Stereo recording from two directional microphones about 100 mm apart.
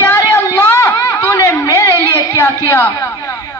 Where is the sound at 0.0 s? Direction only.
25° left (ahead or behind).